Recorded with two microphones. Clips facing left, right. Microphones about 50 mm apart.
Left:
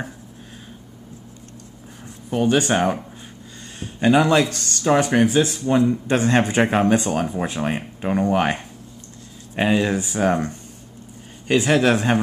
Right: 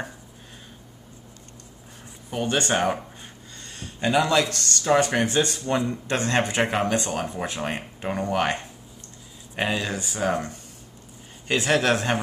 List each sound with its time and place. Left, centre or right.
2.3 s speech: centre
4.2 s speech: centre
11.5 s speech: centre